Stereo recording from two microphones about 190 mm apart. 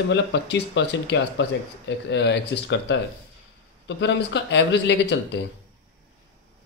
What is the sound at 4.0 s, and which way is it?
Speech, 70° left (ahead or behind).